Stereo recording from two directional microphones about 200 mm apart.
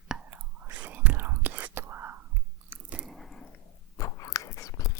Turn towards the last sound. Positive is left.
turn(degrees=15)  # may be behind; listen again after turning